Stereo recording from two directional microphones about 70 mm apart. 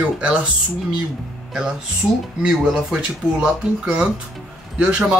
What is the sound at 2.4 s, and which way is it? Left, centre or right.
Speech, centre.